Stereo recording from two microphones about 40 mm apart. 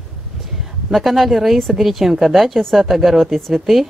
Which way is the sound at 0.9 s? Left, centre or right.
Centre.